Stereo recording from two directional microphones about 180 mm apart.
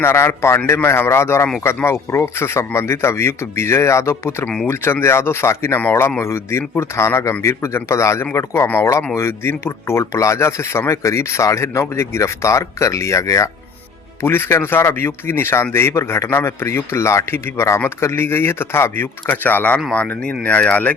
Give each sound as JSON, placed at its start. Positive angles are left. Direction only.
{"t": 0.0, "sound": "a man's voice", "side_deg": 15}